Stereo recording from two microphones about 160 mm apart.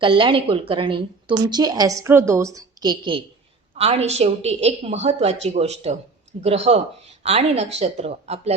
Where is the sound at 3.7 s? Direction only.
40° right (ahead or behind).